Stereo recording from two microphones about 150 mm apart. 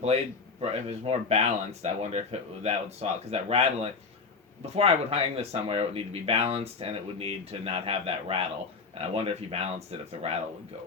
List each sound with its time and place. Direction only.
0.6 s speech: 45° right (ahead or behind)